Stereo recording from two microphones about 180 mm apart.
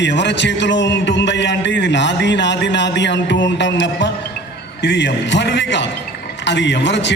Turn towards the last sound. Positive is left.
turn(degrees=75)  # may be behind; listen again after turning